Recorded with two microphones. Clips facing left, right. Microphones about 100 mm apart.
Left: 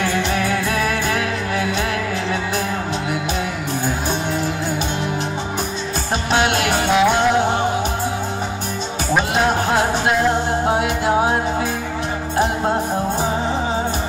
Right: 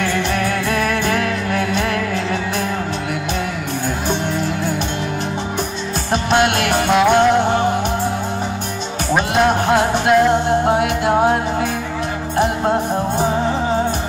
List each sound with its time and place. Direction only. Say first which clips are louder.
0.5 s music: right 1 dB; 55° right (ahead or behind)
6.3 s music: right 2 dB; 55° right (ahead or behind)
6.7 s music: right 2 dB; centre (ahead or behind)
9.1 s music: right 2 dB; centre (ahead or behind)